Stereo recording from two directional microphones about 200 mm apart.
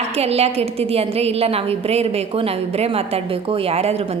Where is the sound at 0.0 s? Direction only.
30° right (ahead or behind).